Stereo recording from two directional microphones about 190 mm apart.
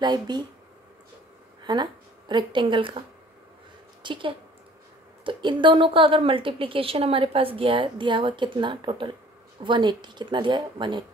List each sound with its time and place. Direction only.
0.0 s a woman's voice: 20° right (ahead or behind)
1.6 s speech: 20° right (ahead or behind)
4.0 s a woman's voice: 25° right (ahead or behind)